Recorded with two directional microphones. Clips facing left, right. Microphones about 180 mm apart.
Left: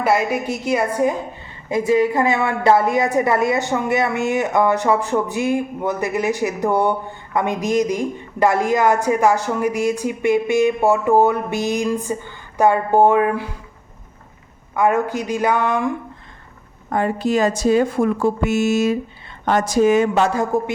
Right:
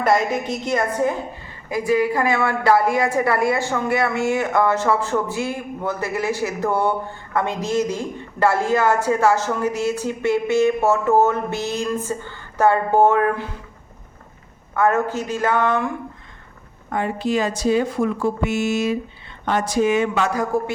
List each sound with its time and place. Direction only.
0.0 s a woman's voice: 5° left (ahead or behind)
1.7 s a woman's voice: 25° left (ahead or behind)
14.8 s a woman's voice: 15° left (ahead or behind)
16.9 s a woman's voice: 40° left (ahead or behind); by 20.7 s 25° left (ahead or behind)